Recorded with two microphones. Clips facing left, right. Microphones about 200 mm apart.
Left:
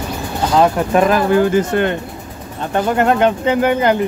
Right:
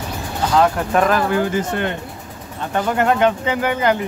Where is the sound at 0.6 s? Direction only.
20° left (ahead or behind).